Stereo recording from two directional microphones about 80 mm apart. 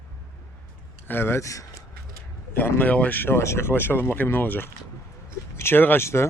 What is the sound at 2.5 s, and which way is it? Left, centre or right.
Speech, left.